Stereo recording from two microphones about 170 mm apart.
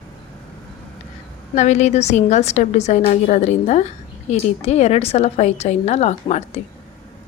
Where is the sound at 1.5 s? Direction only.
45° left (ahead or behind).